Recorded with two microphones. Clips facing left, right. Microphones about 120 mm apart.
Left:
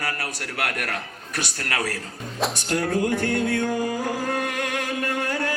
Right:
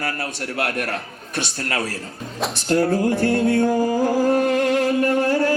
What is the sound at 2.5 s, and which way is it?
Music, 30° right (ahead or behind).